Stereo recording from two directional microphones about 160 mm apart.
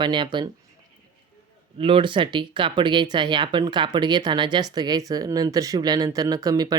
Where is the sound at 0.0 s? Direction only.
30° right (ahead or behind).